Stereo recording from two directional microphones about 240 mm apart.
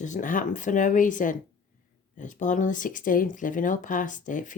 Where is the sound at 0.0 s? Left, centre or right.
Left.